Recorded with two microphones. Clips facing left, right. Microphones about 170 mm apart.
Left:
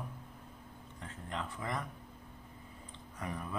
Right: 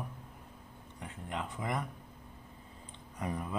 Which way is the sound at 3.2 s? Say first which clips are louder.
Right 4 dB; 20° right (ahead or behind).